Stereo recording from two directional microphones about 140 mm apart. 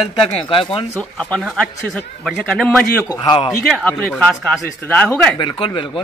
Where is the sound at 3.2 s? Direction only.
35° left (ahead or behind).